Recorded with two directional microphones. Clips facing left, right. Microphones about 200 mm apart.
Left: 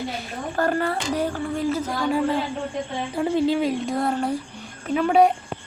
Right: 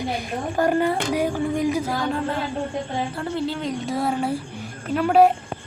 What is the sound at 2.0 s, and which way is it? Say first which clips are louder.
A woman's voice: left 3 dB; 5° left (ahead or behind).